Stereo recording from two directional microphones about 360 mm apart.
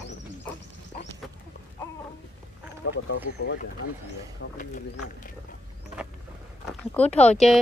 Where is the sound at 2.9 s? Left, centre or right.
Left.